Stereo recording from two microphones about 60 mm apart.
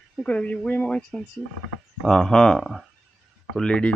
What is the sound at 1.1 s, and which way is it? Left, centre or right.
Speech, centre.